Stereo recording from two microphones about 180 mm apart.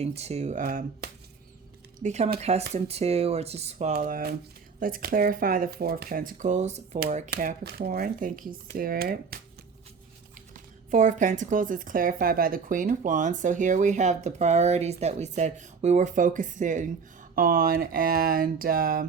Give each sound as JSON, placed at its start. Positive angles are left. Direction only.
{"t": 0.0, "sound": "speech", "side_deg": -35}
{"t": 0.6, "sound": "speech", "side_deg": -55}
{"t": 2.0, "sound": "speech", "side_deg": -40}
{"t": 3.9, "sound": "speech", "side_deg": -50}
{"t": 10.5, "sound": "speech", "side_deg": -45}